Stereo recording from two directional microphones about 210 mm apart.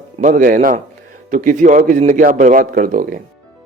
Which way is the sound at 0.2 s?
40° right (ahead or behind).